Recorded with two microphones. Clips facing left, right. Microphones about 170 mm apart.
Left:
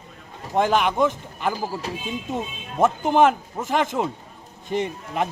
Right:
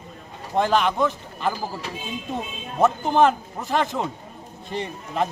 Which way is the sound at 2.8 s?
10° left (ahead or behind).